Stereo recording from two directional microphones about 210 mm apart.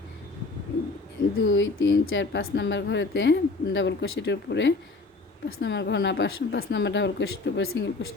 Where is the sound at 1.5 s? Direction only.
60° left (ahead or behind).